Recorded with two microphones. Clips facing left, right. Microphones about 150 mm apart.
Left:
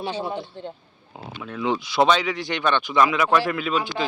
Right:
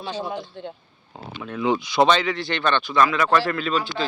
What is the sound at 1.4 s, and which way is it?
Speech, centre (ahead or behind).